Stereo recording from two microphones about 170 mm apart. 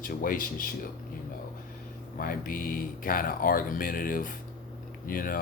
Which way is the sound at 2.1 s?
55° left (ahead or behind).